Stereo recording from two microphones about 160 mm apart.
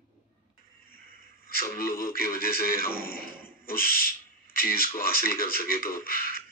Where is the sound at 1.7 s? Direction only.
65° left (ahead or behind).